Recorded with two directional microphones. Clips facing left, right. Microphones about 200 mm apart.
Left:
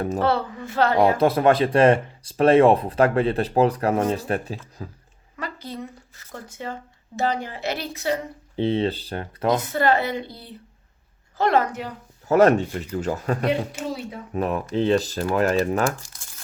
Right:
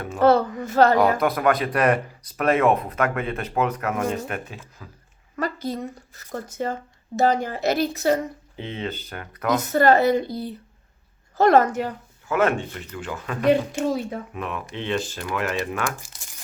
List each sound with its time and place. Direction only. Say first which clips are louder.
0.2 s speech: right 10 dB; 45° right (ahead or behind)
0.9 s speech: left 2 dB; 25° left (ahead or behind)
5.4 s speech: right 6 dB; 45° right (ahead or behind)
8.5 s speech: left 10 dB; 35° left (ahead or behind)
9.6 s speech: right 4 dB; 45° right (ahead or behind)
12.3 s speech: left 6 dB; 40° left (ahead or behind)
16.0 s crumpling: right 1 dB; 15° right (ahead or behind)